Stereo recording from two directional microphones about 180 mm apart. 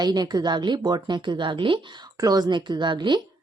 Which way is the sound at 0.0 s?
25° right (ahead or behind).